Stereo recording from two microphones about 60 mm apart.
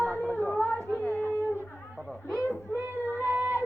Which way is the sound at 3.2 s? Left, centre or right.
Right.